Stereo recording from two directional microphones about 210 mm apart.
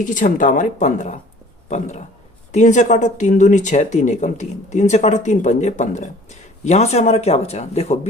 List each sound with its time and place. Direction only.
0.0 s speech: 40° left (ahead or behind)